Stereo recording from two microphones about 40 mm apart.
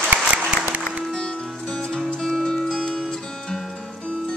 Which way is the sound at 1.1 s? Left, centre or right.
Centre.